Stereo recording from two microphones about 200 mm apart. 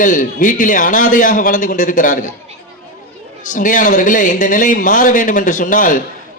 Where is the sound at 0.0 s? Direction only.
40° left (ahead or behind).